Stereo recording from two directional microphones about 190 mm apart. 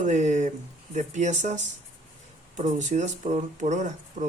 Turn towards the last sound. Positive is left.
turn(degrees=-40)  # may be behind; listen again after turning